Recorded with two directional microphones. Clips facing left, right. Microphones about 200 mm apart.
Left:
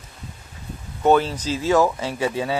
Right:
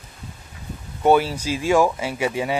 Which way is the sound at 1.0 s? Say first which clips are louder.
Even; 10° right (ahead or behind).